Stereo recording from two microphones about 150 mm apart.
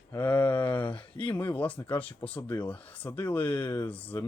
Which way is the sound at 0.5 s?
30° left (ahead or behind).